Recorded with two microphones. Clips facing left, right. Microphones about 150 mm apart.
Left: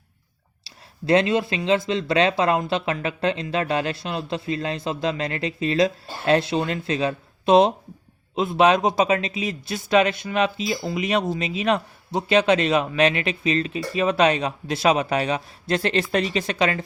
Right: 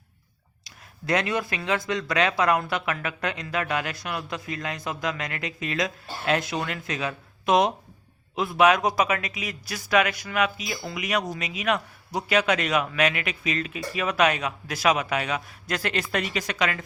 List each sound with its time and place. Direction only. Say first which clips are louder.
0.6 s speech: left 6 dB; 30° left (ahead or behind)